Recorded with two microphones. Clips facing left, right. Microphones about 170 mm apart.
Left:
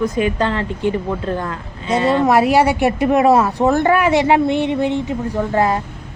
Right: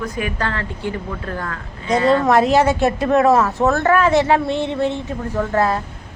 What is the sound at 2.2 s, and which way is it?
Speech, 10° left (ahead or behind).